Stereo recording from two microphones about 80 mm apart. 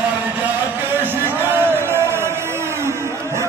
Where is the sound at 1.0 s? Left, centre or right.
Right.